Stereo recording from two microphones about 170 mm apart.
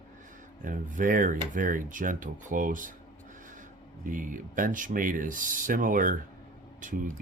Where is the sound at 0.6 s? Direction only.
50° right (ahead or behind).